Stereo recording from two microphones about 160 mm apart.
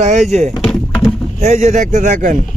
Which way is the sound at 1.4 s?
45° right (ahead or behind).